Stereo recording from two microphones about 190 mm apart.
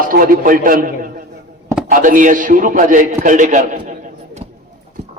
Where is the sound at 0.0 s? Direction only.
50° right (ahead or behind).